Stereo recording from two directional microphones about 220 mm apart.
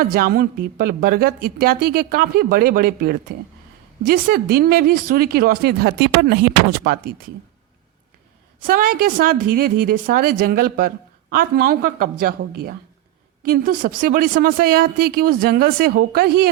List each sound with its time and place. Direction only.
0.0 s speech: 40° right (ahead or behind)
8.6 s a woman's voice: 40° right (ahead or behind)